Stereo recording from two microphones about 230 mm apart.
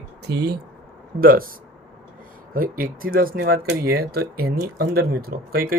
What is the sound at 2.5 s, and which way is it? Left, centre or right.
Speech, right.